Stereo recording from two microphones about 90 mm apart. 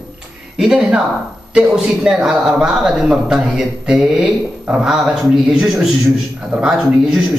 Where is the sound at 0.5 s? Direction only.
10° right (ahead or behind).